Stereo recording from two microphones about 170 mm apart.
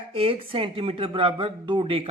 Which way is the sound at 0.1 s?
35° right (ahead or behind).